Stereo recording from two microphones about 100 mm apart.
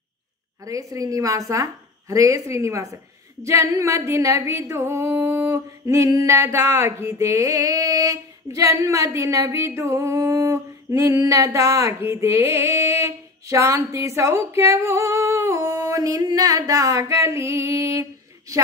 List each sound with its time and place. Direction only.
0.7 s singing: 35° right (ahead or behind)